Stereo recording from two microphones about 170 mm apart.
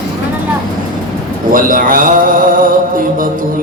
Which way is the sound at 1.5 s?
55° right (ahead or behind).